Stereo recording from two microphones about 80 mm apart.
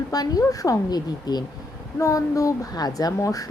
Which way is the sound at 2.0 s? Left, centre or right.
Left.